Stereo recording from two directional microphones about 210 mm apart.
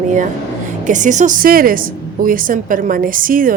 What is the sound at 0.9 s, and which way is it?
Speech, 35° right (ahead or behind).